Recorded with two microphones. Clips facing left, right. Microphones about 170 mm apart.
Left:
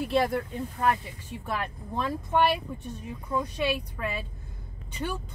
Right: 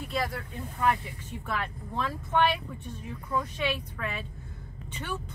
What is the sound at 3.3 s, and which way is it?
Speech, 20° left (ahead or behind).